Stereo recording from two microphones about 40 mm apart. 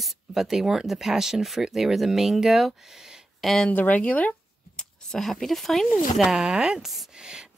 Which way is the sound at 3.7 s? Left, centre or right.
Left.